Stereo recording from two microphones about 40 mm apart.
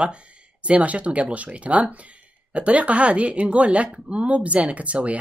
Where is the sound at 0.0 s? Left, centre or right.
Right.